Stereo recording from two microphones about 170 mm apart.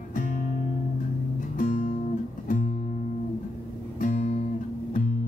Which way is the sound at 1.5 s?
50° left (ahead or behind).